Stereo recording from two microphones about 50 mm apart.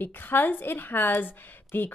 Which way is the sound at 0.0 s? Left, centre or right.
Left.